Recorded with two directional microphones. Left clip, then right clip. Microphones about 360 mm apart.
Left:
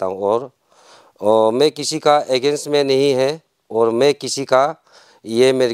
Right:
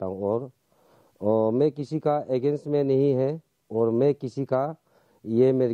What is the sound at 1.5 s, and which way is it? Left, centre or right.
Speech, centre.